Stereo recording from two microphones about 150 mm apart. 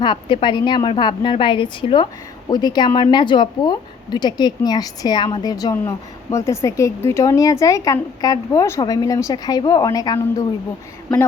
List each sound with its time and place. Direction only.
0.0 s a woman's voice: 30° left (ahead or behind)
11.1 s speech: centre (ahead or behind)